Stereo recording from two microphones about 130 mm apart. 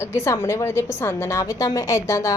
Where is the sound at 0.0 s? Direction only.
20° left (ahead or behind).